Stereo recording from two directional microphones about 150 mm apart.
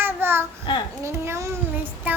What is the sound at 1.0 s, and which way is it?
Child singing, 20° right (ahead or behind).